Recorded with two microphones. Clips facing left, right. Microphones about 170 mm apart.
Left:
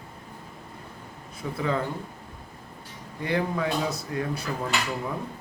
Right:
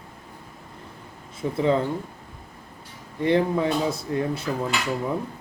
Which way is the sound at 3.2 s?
25° right (ahead or behind).